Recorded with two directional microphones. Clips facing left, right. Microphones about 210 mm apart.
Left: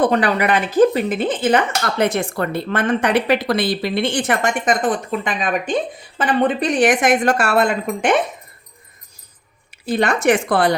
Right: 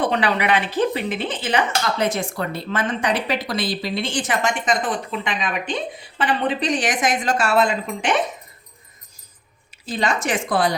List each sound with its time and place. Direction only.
0.0 s speech: 45° left (ahead or behind)
9.8 s speech: 65° left (ahead or behind)